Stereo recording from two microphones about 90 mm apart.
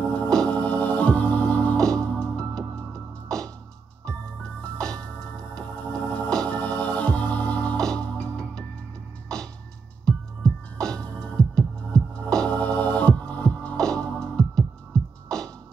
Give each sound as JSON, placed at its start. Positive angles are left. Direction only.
{"t": 0.0, "sound": "organ", "side_deg": 15}
{"t": 3.3, "sound": "music", "side_deg": 5}
{"t": 4.7, "sound": "music", "side_deg": 10}
{"t": 10.0, "sound": "music", "side_deg": 5}